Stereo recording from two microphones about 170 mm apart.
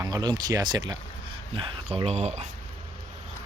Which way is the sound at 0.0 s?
25° right (ahead or behind).